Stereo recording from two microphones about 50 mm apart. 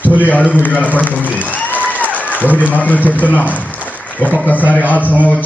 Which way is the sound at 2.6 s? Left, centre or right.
Left.